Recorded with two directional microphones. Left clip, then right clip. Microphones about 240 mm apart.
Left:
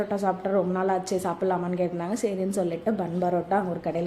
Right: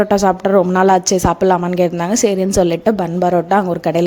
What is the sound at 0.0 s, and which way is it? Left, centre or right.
A woman's voice, right.